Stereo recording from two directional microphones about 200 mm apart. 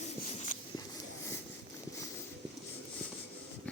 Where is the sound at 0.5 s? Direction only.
40° left (ahead or behind).